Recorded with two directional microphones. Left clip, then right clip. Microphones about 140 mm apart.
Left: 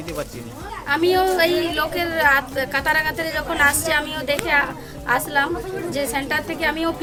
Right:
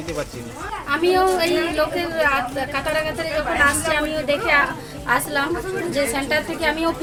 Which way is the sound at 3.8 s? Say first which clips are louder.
Right 1 dB; 35° left (ahead or behind).